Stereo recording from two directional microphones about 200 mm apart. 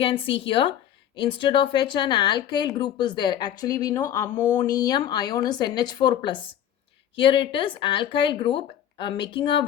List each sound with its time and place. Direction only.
0.0 s a woman's voice: 25° left (ahead or behind)